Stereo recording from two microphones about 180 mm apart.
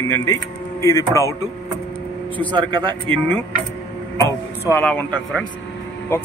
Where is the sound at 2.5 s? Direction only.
25° right (ahead or behind).